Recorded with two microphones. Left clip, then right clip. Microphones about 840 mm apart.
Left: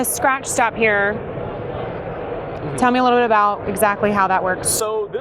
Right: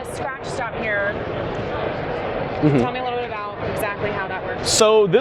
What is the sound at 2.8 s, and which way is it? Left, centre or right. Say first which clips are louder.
Speech: left 9 dB; left.